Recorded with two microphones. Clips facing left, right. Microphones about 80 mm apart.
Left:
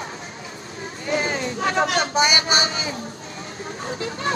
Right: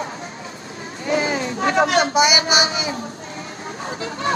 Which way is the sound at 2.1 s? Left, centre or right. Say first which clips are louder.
Right 3 dB; centre.